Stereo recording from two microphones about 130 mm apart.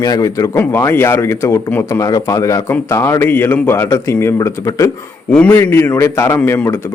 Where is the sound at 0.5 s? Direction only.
15° left (ahead or behind).